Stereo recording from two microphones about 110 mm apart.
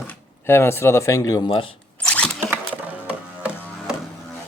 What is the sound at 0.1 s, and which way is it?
Speech, 20° left (ahead or behind).